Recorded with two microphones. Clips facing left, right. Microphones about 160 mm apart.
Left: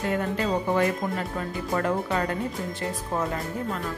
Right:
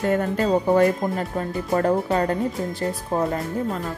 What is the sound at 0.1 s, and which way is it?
Speech, 40° right (ahead or behind).